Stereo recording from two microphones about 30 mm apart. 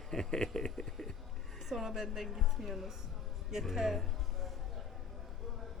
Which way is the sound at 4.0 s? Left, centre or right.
Centre.